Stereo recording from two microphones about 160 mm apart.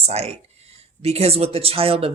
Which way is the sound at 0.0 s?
40° right (ahead or behind).